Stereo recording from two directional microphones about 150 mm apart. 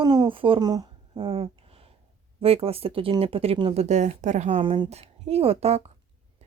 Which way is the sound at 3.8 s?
50° right (ahead or behind).